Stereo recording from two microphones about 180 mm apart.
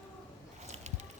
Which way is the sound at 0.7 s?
40° right (ahead or behind).